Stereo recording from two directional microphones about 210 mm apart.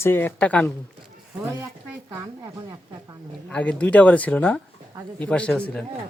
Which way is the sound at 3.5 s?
5° left (ahead or behind).